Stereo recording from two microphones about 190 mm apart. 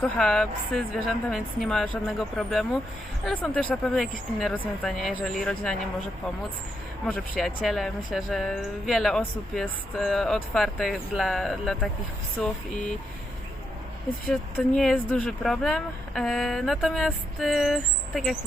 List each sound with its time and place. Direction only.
0.0 s speech: 5° left (ahead or behind)
7.1 s speech: 5° left (ahead or behind)
14.8 s speech: 5° left (ahead or behind)